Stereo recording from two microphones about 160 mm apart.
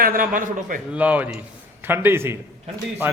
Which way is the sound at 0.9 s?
10° right (ahead or behind).